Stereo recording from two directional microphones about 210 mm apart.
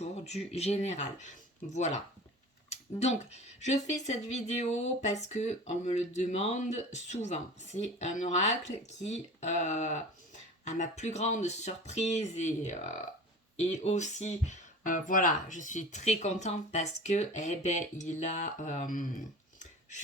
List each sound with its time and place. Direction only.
0.0 s speech: 30° left (ahead or behind)